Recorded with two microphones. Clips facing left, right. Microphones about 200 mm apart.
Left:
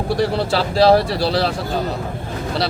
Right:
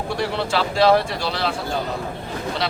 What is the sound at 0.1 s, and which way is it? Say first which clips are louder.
Speech: left 5 dB; 35° left (ahead or behind).